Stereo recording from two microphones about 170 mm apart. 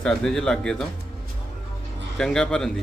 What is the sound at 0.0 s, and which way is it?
Speech, 5° left (ahead or behind).